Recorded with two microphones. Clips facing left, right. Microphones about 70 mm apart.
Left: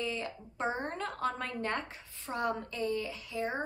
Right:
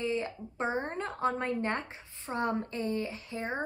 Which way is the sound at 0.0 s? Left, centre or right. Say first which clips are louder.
Right 4 dB; right.